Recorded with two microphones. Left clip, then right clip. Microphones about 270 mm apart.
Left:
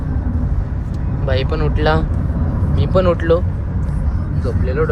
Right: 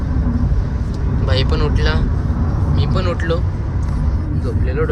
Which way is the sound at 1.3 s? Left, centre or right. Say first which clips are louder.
Left 1 dB; centre.